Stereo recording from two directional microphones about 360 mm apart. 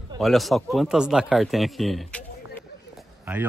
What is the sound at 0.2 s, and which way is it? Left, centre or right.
Speech, centre.